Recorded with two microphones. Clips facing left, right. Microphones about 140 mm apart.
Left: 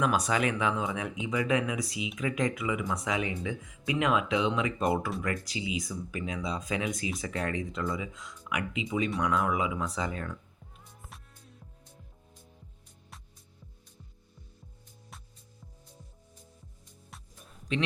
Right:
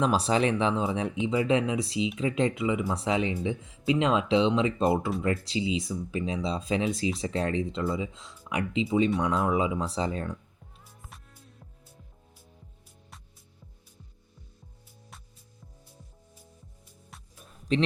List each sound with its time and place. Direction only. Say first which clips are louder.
0.0 s speech: right 3 dB; 30° right (ahead or behind)
17.1 s music: even; centre (ahead or behind)